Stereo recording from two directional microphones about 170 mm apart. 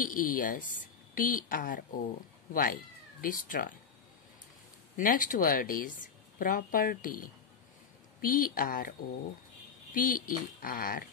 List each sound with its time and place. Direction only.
0.0 s speech: 55° left (ahead or behind)
4.9 s speech: 55° left (ahead or behind)
9.9 s speech: 55° left (ahead or behind)